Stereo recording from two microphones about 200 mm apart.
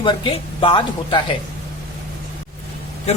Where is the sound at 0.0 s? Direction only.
25° left (ahead or behind).